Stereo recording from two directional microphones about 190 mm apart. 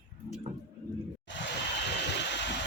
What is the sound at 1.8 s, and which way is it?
Vehicle, 65° left (ahead or behind).